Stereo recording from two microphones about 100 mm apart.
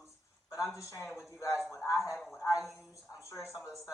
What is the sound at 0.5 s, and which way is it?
A man's voice, 30° left (ahead or behind).